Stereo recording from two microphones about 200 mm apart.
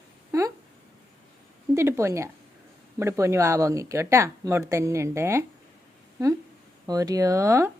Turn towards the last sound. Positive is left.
turn(degrees=-15)  # may be behind; listen again after turning